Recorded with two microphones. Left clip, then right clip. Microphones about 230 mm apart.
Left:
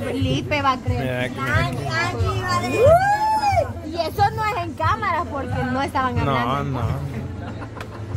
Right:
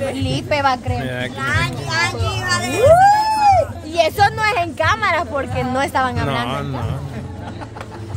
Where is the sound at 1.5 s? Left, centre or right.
Right.